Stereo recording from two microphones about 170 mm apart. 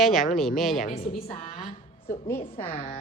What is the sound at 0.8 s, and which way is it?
Speech, 55° left (ahead or behind).